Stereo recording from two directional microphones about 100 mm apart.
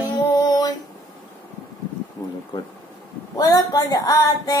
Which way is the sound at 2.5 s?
50° left (ahead or behind).